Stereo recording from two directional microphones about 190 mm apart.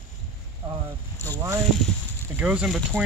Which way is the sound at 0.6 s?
20° right (ahead or behind).